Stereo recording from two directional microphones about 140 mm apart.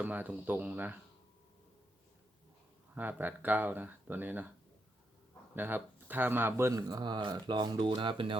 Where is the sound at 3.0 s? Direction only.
15° right (ahead or behind).